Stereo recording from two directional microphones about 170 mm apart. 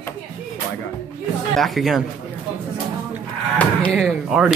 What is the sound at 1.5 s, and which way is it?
Speech, centre (ahead or behind).